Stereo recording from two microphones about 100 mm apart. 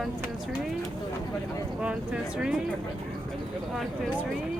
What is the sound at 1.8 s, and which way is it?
Speech, 10° right (ahead or behind).